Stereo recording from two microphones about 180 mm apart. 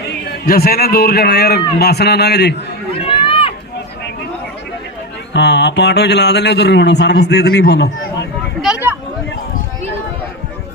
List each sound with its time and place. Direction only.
0.4 s a man's voice: 55° left (ahead or behind)
3.2 s run: 30° left (ahead or behind)
5.3 s speech: 70° left (ahead or behind)
8.6 s a sound: 10° right (ahead or behind)